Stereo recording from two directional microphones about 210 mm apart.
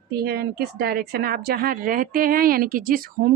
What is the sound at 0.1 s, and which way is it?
A woman's voice, 50° right (ahead or behind).